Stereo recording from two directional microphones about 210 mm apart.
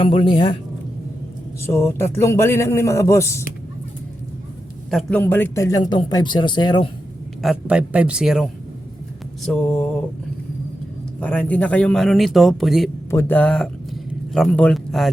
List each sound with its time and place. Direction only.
0.0 s a man's voice: 25° left (ahead or behind)
1.6 s a man's voice: 10° left (ahead or behind)
4.9 s a man's voice: centre (ahead or behind); by 6.8 s 20° left (ahead or behind)
7.4 s a man's voice: 5° right (ahead or behind)
11.2 s a man's voice: 5° left (ahead or behind)
13.1 s a man's voice: 10° left (ahead or behind)